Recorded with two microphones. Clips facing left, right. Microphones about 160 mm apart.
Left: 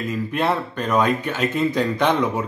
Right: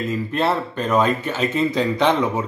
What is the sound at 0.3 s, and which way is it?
Speech, 10° left (ahead or behind).